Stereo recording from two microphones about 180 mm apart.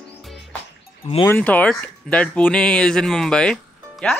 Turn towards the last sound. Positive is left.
turn(degrees=5)  # may be behind; listen again after turning